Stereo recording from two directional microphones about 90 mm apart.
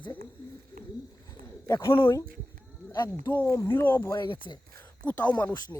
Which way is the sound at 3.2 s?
20° left (ahead or behind).